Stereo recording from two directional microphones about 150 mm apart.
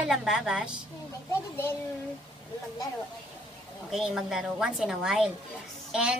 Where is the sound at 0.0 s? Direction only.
Centre (ahead or behind).